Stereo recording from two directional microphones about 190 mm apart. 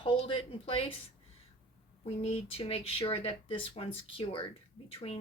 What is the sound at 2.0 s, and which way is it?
Speech, 30° left (ahead or behind).